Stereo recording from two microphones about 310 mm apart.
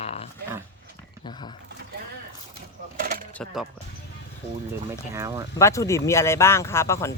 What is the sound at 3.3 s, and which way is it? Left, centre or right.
Speech, centre.